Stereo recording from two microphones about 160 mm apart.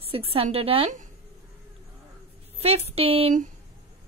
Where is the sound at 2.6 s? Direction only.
40° right (ahead or behind).